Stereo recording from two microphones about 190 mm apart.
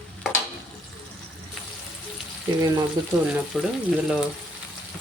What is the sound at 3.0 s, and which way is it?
Frying, 20° right (ahead or behind).